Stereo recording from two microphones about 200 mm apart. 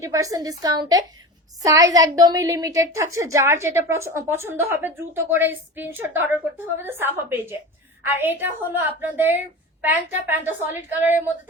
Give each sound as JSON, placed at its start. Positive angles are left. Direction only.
{"t": 0.0, "sound": "a woman's voice", "side_deg": -15}